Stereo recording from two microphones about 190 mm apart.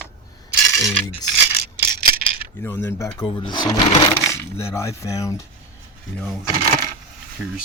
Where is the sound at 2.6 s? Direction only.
15° left (ahead or behind).